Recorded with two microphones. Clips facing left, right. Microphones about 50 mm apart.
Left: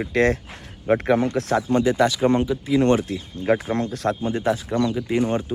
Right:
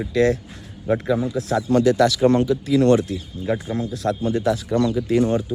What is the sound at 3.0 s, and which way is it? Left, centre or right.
Speech, left.